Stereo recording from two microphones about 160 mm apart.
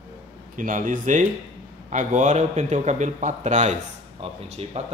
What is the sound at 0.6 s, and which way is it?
Speech, 55° right (ahead or behind).